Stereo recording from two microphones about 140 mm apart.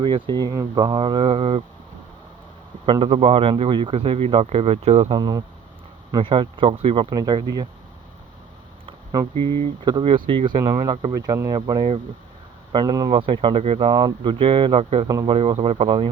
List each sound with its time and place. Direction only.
0.0 s speech: 35° right (ahead or behind)
2.8 s speech: 40° right (ahead or behind)
5.1 s speech: 30° right (ahead or behind)
7.1 s speech: 30° right (ahead or behind)
9.8 s speech: 35° right (ahead or behind)
10.5 s speech: 25° right (ahead or behind); by 15.0 s 45° right (ahead or behind)
15.0 s speech: 25° right (ahead or behind)
15.3 s speech: 40° right (ahead or behind)